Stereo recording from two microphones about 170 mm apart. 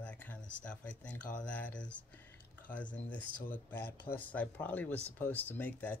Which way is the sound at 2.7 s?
10° left (ahead or behind).